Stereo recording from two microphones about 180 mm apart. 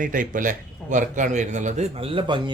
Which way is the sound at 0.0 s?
50° right (ahead or behind).